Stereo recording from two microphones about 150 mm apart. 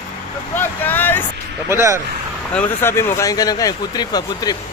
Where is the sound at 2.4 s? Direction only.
10° left (ahead or behind).